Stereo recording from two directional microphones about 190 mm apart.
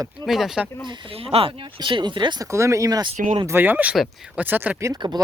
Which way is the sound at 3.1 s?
40° right (ahead or behind).